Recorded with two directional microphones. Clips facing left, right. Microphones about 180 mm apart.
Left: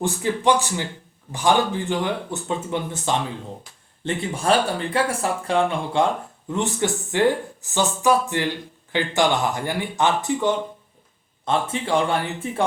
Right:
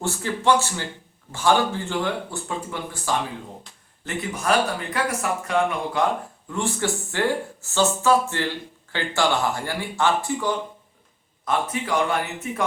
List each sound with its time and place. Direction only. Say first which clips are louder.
0.0 s speech: left 3 dB; 15° left (ahead or behind)